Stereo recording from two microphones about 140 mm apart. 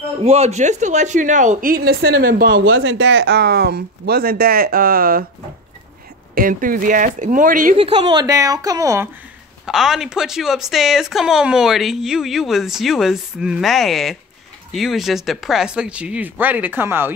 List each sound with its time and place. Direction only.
0.2 s a woman's voice: 50° right (ahead or behind); by 2.6 s 90° right
3.7 s speech: 90° right
6.3 s speech: 85° right
7.7 s a woman's voice: 40° right (ahead or behind); by 9.1 s 20° right (ahead or behind)
9.7 s a woman's voice: 5° right (ahead or behind)